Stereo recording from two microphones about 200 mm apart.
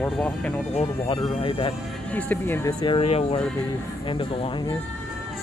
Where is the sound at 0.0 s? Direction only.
5° left (ahead or behind).